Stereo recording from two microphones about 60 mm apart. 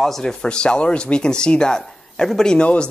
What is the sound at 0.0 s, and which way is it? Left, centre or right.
Speech, centre.